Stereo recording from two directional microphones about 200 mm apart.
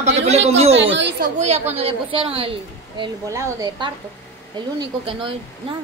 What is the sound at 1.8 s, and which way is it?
Speech, 30° right (ahead or behind).